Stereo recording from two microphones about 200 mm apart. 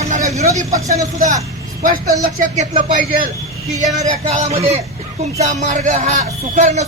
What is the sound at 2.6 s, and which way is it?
A man's voice, 40° right (ahead or behind).